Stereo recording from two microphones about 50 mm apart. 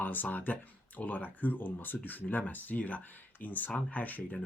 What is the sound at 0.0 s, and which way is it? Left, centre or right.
Speech, left.